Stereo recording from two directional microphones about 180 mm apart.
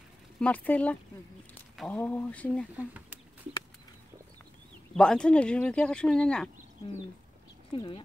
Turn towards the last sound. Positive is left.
turn(degrees=30)  # may be behind; listen again after turning